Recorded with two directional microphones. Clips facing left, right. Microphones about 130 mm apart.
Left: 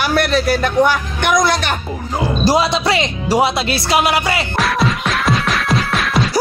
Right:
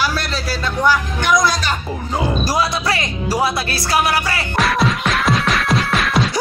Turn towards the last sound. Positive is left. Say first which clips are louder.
# left 1 dB
turn(degrees=0)  # may be behind; listen again after turning